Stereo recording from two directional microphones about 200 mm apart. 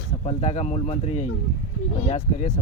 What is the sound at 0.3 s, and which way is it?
Speech, 35° left (ahead or behind).